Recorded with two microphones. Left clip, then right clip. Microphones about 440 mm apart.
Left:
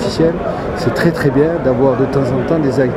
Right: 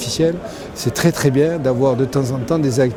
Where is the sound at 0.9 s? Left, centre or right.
Right.